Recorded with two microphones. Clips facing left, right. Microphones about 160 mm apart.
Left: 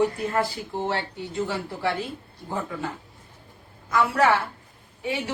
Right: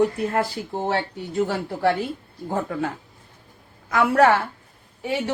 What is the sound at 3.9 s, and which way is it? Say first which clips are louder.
Speech: right 4 dB; 60° right (ahead or behind).